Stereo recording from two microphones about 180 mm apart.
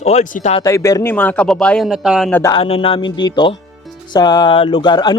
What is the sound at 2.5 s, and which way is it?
Speech, 30° left (ahead or behind).